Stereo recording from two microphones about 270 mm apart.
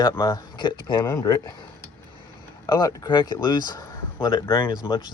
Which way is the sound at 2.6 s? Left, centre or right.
Centre.